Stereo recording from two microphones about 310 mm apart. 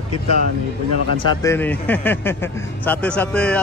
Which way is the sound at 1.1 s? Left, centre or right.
Centre.